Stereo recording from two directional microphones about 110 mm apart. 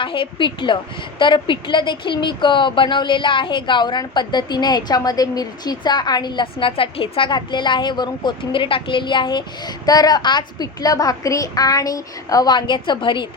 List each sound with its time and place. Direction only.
0.0 s a woman's voice: 50° left (ahead or behind)